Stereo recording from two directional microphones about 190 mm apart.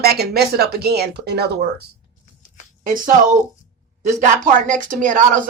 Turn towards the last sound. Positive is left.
turn(degrees=-40)  # may be behind; listen again after turning